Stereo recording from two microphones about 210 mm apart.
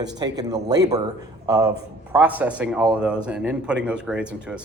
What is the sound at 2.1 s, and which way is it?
Speech, 10° right (ahead or behind).